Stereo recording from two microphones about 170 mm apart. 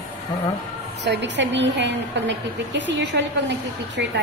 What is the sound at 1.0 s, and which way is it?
A woman's voice, 90° right.